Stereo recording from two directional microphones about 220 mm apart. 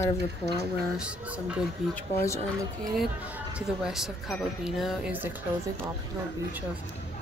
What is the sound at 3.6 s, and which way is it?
Speech, centre (ahead or behind).